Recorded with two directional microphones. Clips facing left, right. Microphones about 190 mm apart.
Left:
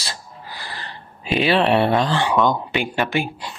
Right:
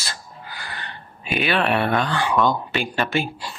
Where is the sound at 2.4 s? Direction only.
15° left (ahead or behind).